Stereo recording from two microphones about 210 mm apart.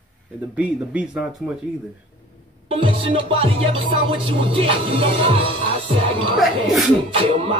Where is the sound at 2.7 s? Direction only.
25° right (ahead or behind).